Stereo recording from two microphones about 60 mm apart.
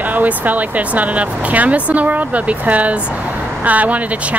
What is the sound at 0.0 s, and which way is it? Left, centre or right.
Speech, right.